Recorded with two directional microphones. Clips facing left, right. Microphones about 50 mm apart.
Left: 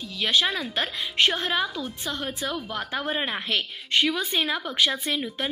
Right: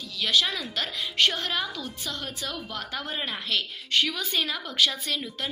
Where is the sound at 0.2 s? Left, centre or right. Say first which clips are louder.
Left 2 dB; left.